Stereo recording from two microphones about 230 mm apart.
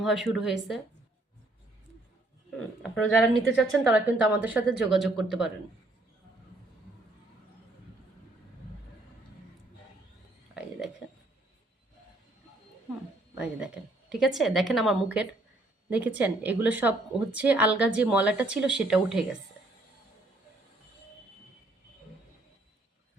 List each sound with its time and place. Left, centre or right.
0.0 s a woman's voice: centre
2.8 s a woman's voice: centre
13.3 s a woman's voice: centre